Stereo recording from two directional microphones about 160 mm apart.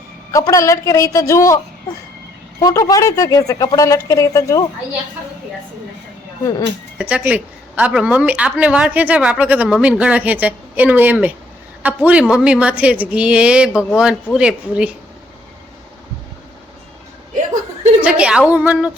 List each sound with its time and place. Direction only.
0.3 s speech: 20° left (ahead or behind)
2.6 s speech: 20° left (ahead or behind)
7.0 s a woman's voice: 10° right (ahead or behind)
18.0 s a woman's voice: 5° right (ahead or behind)